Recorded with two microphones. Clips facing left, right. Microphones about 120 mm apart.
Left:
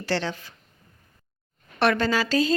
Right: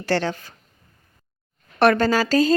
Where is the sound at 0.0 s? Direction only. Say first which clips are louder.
Right 4 dB; 50° right (ahead or behind).